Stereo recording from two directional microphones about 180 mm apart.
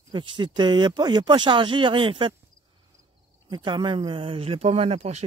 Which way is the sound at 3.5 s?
25° right (ahead or behind).